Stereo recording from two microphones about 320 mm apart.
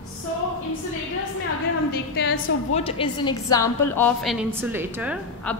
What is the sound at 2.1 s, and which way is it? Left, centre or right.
Speech, left.